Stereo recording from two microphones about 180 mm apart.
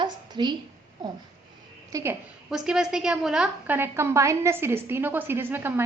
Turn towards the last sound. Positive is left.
turn(degrees=-10)  # may be behind; listen again after turning